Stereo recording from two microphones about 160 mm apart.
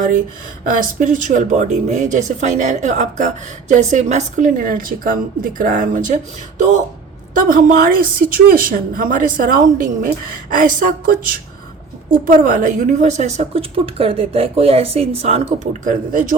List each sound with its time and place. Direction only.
0.6 s speech: 60° right (ahead or behind)
7.3 s a woman's voice: 60° right (ahead or behind)